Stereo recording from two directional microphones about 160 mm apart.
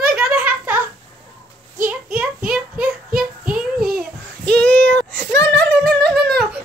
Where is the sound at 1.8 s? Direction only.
10° right (ahead or behind).